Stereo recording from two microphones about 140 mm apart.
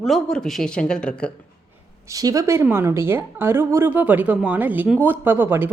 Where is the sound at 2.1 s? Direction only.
25° right (ahead or behind).